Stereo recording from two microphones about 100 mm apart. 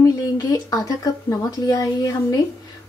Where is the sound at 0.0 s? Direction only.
35° left (ahead or behind).